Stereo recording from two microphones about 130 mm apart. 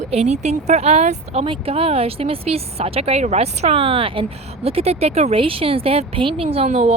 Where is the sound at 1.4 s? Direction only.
45° right (ahead or behind).